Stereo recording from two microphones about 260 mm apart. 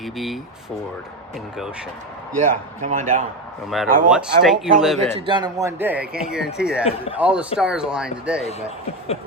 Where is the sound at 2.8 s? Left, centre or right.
Right.